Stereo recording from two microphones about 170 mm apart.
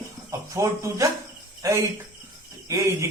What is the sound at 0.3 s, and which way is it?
A man's voice, 20° right (ahead or behind).